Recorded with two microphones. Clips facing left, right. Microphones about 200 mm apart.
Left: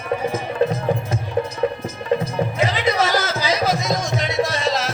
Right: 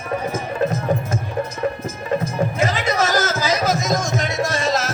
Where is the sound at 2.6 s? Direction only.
45° right (ahead or behind).